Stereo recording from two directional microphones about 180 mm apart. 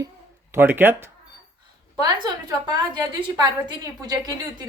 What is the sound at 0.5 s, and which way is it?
Speech, 10° right (ahead or behind).